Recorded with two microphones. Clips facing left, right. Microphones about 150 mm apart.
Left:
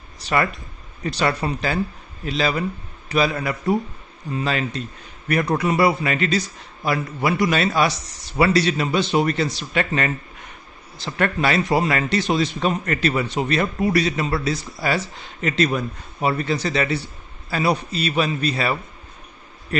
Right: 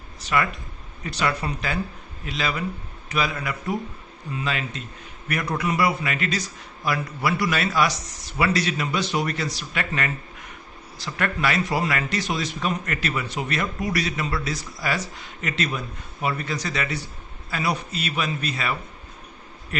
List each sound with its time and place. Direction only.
0.2 s a man's voice: 35° left (ahead or behind)